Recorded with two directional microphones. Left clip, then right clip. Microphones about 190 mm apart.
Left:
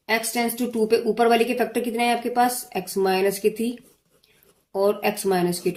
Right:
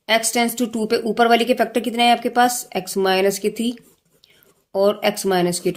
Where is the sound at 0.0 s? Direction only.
50° right (ahead or behind).